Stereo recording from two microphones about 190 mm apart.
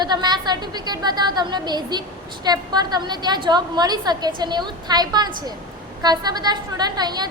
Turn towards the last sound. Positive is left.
turn(degrees=-20)  # may be behind; listen again after turning